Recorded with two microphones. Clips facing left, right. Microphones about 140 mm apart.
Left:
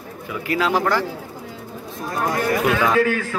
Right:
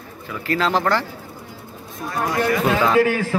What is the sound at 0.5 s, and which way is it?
Speech, 10° left (ahead or behind).